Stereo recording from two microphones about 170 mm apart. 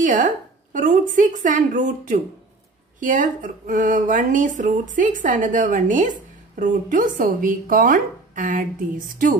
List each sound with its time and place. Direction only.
0.0 s a woman's voice: 50° right (ahead or behind)